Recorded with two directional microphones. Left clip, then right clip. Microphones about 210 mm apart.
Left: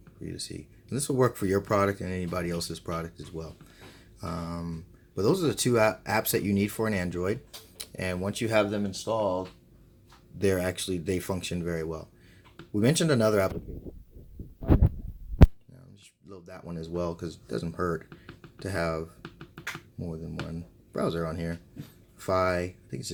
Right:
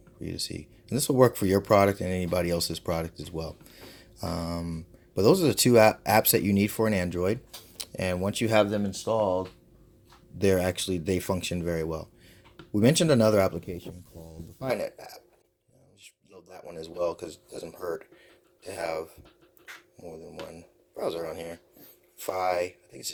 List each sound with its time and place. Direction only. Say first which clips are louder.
0.2 s speech: right 4 dB; 25° right (ahead or behind)
10.3 s speech: right 3 dB; 25° right (ahead or behind)
16.4 s speech: right 1 dB; 25° right (ahead or behind)
20.5 s speech: left 6 dB; 20° right (ahead or behind)